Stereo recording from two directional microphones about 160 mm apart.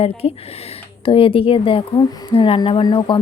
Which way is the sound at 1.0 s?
35° left (ahead or behind).